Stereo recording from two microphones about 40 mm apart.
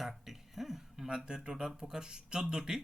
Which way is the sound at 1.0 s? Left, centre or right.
Right.